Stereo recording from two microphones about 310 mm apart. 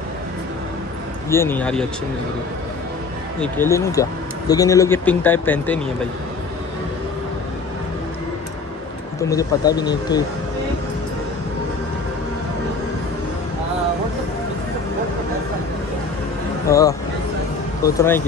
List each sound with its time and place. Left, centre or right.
1.3 s speech: centre
3.3 s speech: centre
9.2 s speech: centre
16.6 s speech: centre